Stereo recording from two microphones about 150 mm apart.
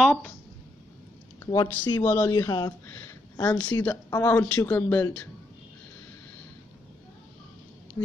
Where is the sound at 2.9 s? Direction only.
15° left (ahead or behind).